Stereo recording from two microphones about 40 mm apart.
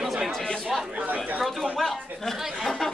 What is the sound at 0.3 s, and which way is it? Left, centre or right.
Chatter, centre.